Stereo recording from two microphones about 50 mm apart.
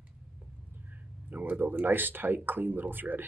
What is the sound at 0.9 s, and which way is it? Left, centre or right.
Speech, right.